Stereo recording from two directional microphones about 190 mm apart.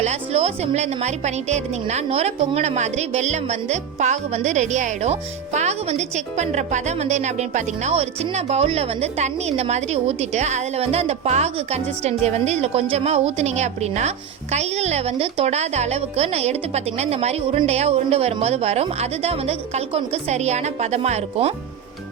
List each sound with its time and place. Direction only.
0.0 s a woman's voice: 35° right (ahead or behind)